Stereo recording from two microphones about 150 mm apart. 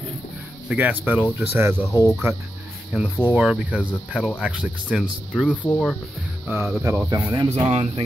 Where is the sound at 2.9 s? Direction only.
5° right (ahead or behind).